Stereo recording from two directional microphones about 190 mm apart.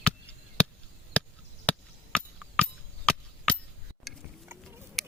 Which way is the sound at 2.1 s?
5° left (ahead or behind).